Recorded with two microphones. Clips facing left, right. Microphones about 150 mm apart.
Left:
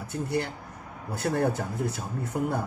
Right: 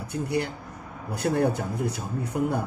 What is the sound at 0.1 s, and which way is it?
Speech, 15° right (ahead or behind).